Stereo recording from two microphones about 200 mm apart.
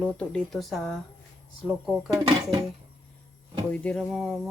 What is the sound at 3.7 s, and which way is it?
Speech, 5° left (ahead or behind).